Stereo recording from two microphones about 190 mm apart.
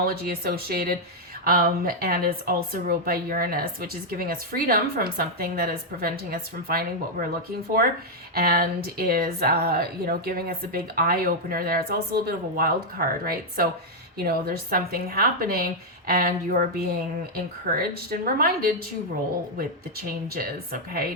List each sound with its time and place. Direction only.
0.0 s speech: 55° right (ahead or behind)
8.4 s speech: 55° right (ahead or behind)
20.2 s speech: 50° right (ahead or behind)